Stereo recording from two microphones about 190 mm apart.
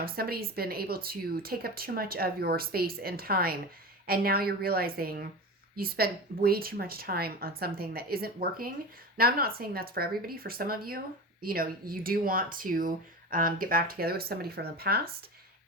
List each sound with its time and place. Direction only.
0.0 s speech: 55° right (ahead or behind)